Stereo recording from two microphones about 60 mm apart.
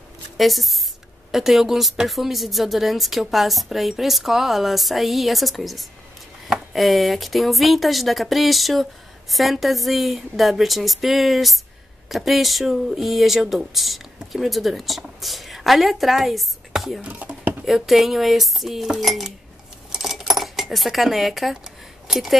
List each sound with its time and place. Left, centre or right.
0.4 s speech: centre
17.0 s a sound: right
17.6 s speech: centre
19.9 s dishes: centre
22.0 s speech: centre